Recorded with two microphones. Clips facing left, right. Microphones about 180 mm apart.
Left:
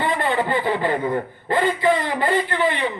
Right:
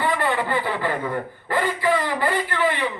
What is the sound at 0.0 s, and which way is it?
A man's voice, 20° left (ahead or behind).